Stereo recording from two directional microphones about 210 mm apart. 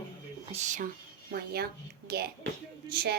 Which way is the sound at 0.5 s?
35° right (ahead or behind).